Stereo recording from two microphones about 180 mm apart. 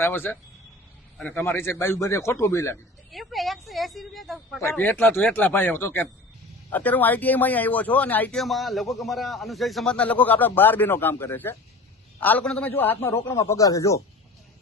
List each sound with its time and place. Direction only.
0.0 s a man's voice: 10° left (ahead or behind)
3.1 s a woman's voice: centre (ahead or behind); by 14.0 s 15° left (ahead or behind)